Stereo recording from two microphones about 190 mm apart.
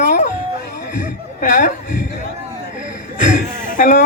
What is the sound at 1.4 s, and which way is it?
Chuckle, 45° left (ahead or behind).